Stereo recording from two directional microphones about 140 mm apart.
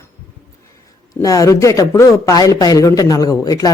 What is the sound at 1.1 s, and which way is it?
Speech, 25° left (ahead or behind).